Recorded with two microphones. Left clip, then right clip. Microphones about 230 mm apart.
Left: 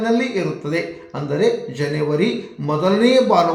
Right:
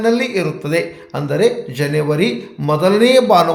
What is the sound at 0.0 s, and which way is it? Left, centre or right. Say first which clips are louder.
Speech: right 4 dB; right.